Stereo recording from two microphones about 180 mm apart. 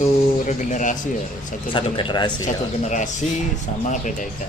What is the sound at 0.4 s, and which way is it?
Speech, 45° left (ahead or behind).